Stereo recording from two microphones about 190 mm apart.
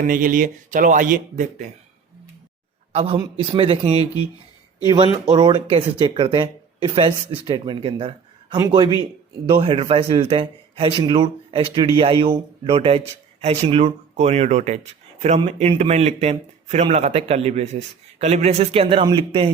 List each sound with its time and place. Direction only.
0.0 s speech: 45° right (ahead or behind)
2.9 s a man's voice: 30° right (ahead or behind)
5.3 s a man's voice: 25° right (ahead or behind)